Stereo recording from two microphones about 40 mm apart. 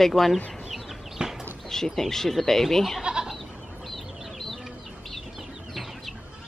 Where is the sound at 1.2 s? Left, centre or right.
Right.